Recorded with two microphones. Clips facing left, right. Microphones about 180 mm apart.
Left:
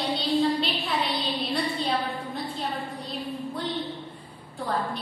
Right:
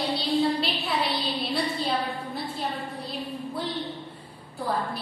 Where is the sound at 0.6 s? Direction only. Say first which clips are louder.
Even; centre (ahead or behind).